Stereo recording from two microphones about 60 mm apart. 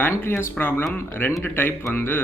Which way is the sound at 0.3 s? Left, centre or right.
Left.